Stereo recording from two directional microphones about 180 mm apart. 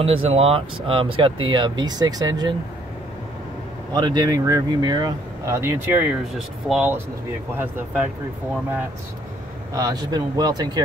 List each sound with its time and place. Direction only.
0.0 s speech: 30° right (ahead or behind)
3.9 s speech: 25° right (ahead or behind)
9.8 s speech: 20° right (ahead or behind)